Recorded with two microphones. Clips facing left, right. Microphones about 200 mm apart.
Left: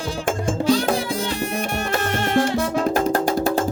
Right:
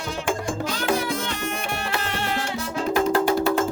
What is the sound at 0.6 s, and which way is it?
Music, 30° left (ahead or behind).